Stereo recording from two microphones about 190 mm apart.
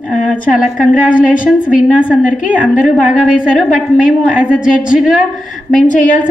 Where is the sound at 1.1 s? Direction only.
45° left (ahead or behind).